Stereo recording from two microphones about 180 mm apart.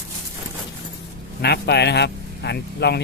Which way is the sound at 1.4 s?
65° left (ahead or behind).